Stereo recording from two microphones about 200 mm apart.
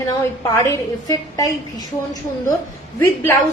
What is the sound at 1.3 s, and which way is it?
A woman's voice, 15° left (ahead or behind).